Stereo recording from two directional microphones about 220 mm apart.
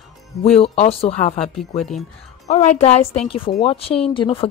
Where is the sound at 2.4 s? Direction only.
30° left (ahead or behind).